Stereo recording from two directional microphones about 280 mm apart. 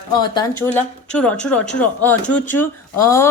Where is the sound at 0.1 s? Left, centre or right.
Centre.